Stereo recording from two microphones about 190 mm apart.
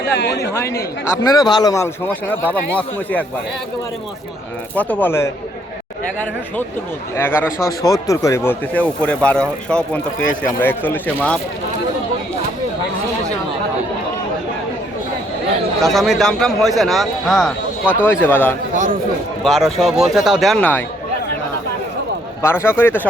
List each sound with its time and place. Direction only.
0.0 s a man's voice: 60° left (ahead or behind)
0.5 s speech: 15° left (ahead or behind)
4.7 s speech: 10° left (ahead or behind)
7.2 s speech: 10° left (ahead or behind)
15.8 s a man's voice: centre (ahead or behind)
18.7 s a man's voice: 40° right (ahead or behind)
19.5 s a man's voice: centre (ahead or behind)
22.4 s speech: 10° left (ahead or behind)